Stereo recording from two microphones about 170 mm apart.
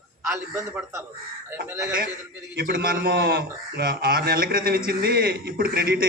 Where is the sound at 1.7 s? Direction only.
15° right (ahead or behind).